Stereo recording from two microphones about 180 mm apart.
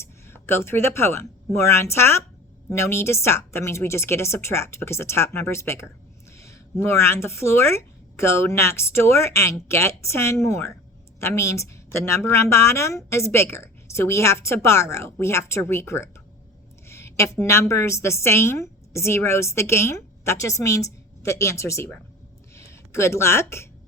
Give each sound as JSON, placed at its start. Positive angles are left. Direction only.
{"t": 0.0, "sound": "a woman's voice", "side_deg": 15}
{"t": 16.9, "sound": "a sound", "side_deg": 15}
{"t": 17.4, "sound": "a woman's voice", "side_deg": 15}